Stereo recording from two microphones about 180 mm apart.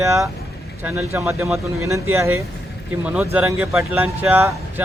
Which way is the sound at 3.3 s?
5° right (ahead or behind).